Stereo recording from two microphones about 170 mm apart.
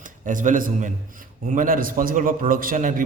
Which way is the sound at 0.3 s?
50° right (ahead or behind).